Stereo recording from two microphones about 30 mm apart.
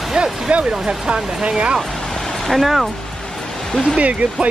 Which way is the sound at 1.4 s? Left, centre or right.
Right.